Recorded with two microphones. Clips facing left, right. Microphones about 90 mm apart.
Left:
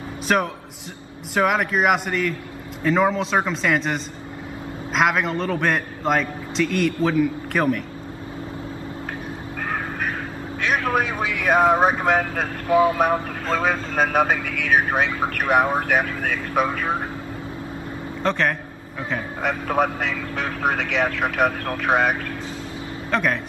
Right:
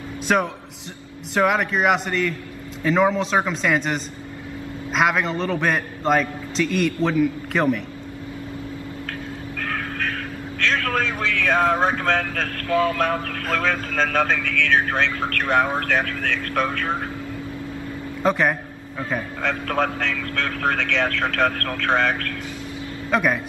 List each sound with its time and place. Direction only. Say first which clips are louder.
0.3 s a man's voice: even; centre (ahead or behind)
9.6 s vehicle: left 1 dB; 15° left (ahead or behind)
10.6 s a man's voice: left 1 dB; 15° left (ahead or behind)
18.2 s a man's voice: right 2 dB; 5° right (ahead or behind)
19.4 s a man's voice: left 2 dB; 10° left (ahead or behind)
23.1 s a man's voice: right 2 dB; 5° right (ahead or behind)